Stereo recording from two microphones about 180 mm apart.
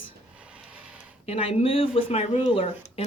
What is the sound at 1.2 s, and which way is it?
Speech, 35° left (ahead or behind).